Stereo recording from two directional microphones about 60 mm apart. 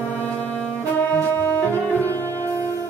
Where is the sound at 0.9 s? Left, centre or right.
Left.